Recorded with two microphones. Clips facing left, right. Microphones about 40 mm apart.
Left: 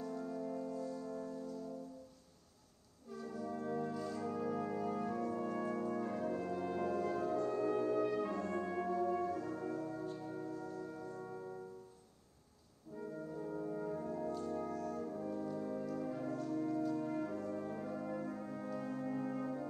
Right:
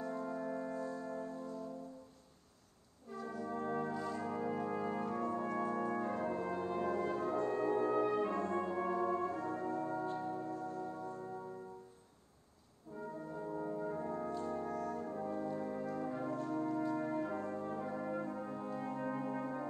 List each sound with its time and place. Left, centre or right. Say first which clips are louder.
0.0 s music: right 2 dB; right
3.1 s brass instrument: right 1 dB; right
8.8 s music: right 1 dB; right
13.8 s brass instrument: right 1 dB; right
14.4 s brass instrument: right 1 dB; right
18.5 s music: right 1 dB; right